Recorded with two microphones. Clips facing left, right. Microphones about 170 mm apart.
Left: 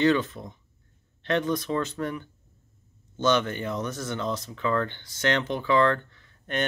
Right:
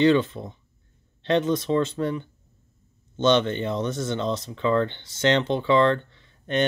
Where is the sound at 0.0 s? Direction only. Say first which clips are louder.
Right 4 dB; 25° right (ahead or behind).